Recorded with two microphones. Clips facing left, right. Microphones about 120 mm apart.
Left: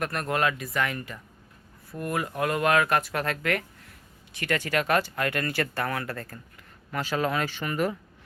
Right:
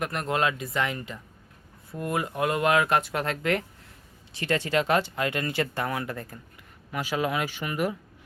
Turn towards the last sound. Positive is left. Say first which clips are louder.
# left 1 dB
turn(degrees=-10)  # may be behind; listen again after turning